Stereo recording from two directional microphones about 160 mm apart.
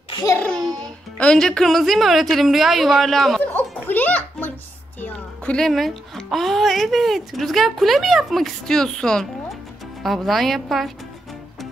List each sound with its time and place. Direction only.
0.1 s a sound: 25° left (ahead or behind)
0.4 s babbling: 5° left (ahead or behind)
1.1 s speech: 5° left (ahead or behind)
2.3 s music: centre (ahead or behind)
5.0 s speech: 10° left (ahead or behind)